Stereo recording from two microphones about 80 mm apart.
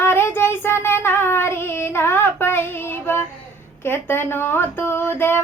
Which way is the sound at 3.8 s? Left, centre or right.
Left.